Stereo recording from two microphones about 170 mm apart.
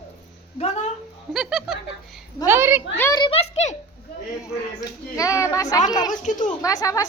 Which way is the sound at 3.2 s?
35° left (ahead or behind).